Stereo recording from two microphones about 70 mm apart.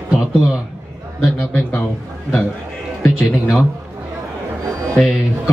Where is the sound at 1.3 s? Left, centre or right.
Left.